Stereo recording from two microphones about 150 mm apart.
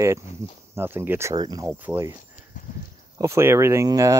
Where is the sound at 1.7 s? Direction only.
10° right (ahead or behind).